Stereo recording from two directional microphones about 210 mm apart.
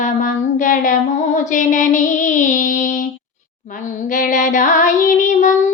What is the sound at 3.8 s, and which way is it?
Child singing, 40° left (ahead or behind).